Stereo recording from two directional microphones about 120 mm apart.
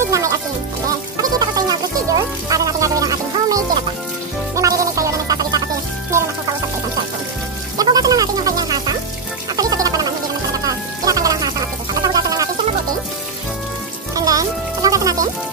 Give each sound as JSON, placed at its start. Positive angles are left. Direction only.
{"t": 0.1, "sound": "music", "side_deg": -25}
{"t": 7.7, "sound": "music", "side_deg": -30}
{"t": 14.1, "sound": "music", "side_deg": -30}